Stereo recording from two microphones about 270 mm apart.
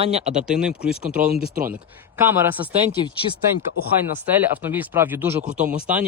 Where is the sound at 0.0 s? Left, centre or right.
Right.